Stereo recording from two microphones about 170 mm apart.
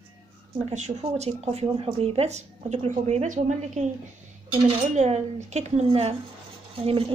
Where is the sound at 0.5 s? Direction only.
40° right (ahead or behind).